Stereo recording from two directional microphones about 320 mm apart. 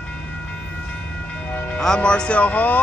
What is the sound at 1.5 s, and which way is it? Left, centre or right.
Speech, centre.